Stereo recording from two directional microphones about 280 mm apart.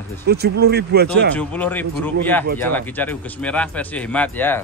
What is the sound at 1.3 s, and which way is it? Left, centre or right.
A man's voice, centre.